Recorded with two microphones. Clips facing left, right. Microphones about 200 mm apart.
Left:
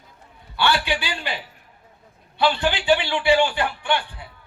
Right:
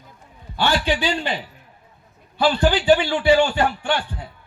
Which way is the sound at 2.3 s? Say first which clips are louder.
Right 3 dB; 40° right (ahead or behind).